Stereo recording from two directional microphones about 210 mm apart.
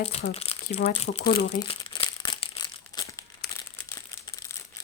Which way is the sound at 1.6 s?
25° left (ahead or behind).